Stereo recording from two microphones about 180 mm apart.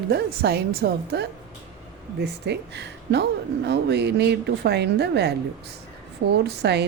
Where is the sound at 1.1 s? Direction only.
70° right (ahead or behind).